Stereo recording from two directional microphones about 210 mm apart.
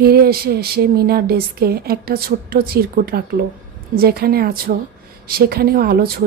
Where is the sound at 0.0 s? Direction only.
45° right (ahead or behind).